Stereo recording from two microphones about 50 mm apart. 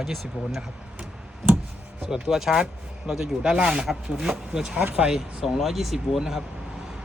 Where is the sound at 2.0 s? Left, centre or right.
Centre.